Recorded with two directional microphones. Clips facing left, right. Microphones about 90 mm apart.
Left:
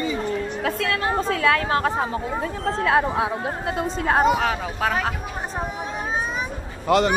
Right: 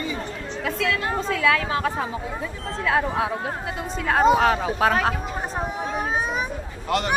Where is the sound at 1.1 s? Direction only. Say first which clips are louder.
Left 2 dB; 50° left (ahead or behind).